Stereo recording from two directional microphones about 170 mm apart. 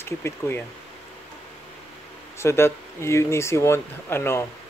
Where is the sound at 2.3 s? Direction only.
15° left (ahead or behind).